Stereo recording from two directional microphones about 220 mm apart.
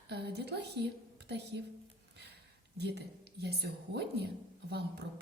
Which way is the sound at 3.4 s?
50° right (ahead or behind).